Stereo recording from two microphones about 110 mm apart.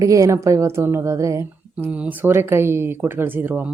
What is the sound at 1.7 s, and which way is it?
Speech, 15° right (ahead or behind).